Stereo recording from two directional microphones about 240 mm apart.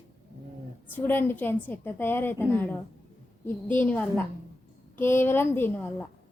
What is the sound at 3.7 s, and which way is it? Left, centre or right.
A woman's voice, centre.